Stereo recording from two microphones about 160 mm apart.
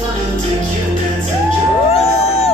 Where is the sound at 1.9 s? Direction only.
40° left (ahead or behind).